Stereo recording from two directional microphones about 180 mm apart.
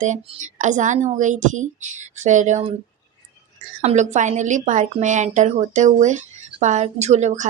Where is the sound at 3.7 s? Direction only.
40° right (ahead or behind).